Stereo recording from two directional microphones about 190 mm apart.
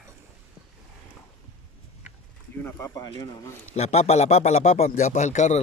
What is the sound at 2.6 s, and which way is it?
Speech, 15° left (ahead or behind).